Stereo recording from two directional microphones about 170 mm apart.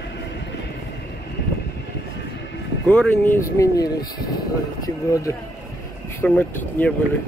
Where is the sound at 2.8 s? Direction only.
5° left (ahead or behind).